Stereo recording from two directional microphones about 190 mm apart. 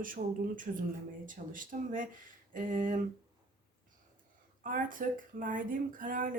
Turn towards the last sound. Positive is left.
turn(degrees=-45)  # may be behind; listen again after turning